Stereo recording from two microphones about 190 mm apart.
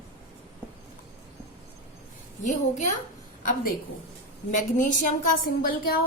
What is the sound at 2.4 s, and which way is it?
Speech, 40° left (ahead or behind).